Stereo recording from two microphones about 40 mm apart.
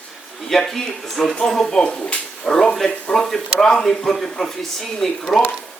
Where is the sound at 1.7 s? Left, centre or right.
Left.